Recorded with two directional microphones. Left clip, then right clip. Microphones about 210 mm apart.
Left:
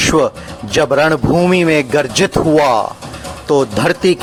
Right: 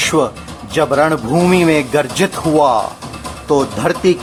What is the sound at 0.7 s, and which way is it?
Speech, 30° left (ahead or behind).